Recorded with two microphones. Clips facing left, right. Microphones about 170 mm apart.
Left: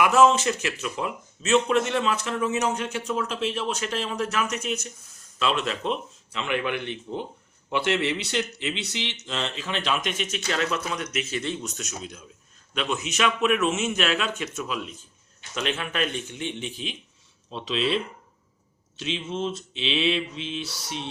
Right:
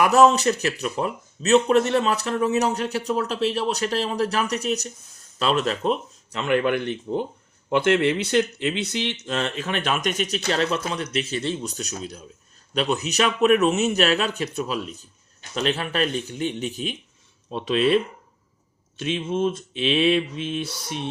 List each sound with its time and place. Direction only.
0.0 s speech: 40° right (ahead or behind)